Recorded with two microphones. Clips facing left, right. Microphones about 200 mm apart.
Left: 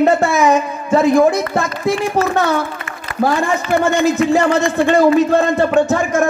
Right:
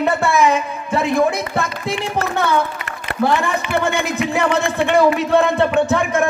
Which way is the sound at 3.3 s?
60° right (ahead or behind).